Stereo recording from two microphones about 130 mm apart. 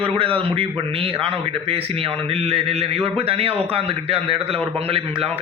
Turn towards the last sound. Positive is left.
turn(degrees=-45)  # may be behind; listen again after turning